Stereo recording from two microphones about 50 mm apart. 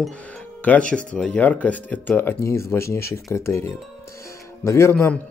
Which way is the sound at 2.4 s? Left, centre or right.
Left.